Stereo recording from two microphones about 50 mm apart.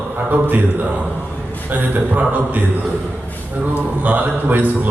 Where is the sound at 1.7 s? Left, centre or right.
Right.